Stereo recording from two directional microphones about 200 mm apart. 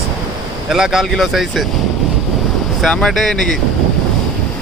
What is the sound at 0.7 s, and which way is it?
Speech, centre (ahead or behind).